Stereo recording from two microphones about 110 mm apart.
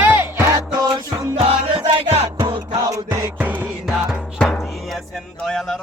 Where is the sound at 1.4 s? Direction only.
55° right (ahead or behind).